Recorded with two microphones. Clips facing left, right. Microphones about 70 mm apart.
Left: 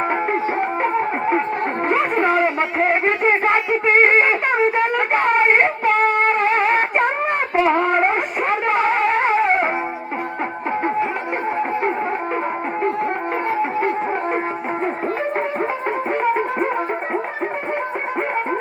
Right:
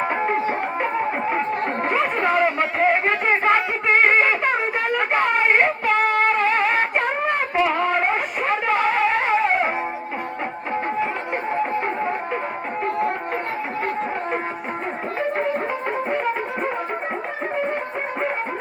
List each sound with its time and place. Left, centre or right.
0.1 s music: left
1.3 s a sound: left
5.1 s a sound: left
6.2 s music: left
7.6 s music: left
12.8 s music: left
16.0 s music: left